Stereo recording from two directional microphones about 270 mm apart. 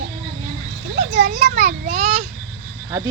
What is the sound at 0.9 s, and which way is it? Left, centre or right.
A child's voice, right.